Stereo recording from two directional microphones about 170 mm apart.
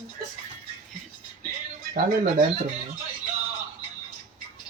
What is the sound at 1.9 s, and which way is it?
Speech, 50° right (ahead or behind).